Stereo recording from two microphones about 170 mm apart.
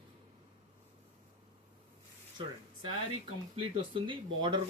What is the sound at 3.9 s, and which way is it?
Speech, 30° right (ahead or behind).